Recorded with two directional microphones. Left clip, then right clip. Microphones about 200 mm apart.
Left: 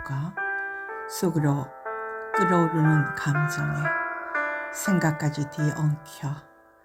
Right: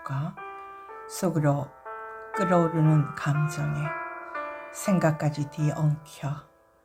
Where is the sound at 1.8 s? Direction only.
30° left (ahead or behind).